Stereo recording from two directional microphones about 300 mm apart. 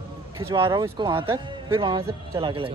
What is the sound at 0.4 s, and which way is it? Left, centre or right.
Speech, centre.